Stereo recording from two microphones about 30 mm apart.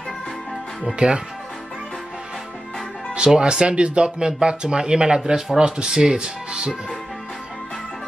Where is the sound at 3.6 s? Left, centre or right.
Right.